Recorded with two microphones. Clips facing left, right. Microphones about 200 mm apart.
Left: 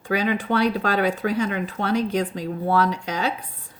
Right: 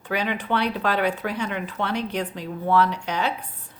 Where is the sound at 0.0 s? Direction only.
45° left (ahead or behind).